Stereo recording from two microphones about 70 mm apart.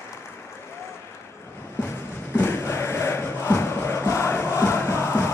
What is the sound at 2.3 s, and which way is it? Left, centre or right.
Crowd, left.